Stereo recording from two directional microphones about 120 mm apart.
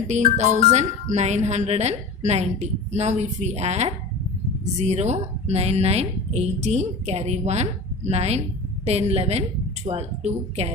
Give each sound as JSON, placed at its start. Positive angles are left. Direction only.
{"t": 0.1, "sound": "a woman's voice", "side_deg": -85}